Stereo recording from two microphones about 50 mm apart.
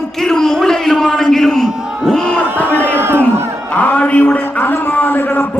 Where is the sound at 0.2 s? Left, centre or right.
Centre.